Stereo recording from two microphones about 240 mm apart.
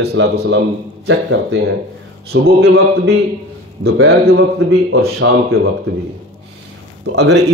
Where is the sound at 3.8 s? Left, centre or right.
Right.